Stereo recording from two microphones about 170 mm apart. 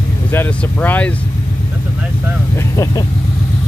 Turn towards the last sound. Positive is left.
turn(degrees=20)  # may be behind; listen again after turning